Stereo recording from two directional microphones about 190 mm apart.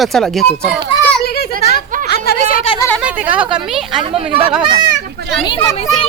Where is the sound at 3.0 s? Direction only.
5° right (ahead or behind).